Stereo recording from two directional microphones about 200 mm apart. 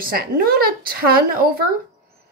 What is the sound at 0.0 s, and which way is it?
A woman's voice, 50° right (ahead or behind).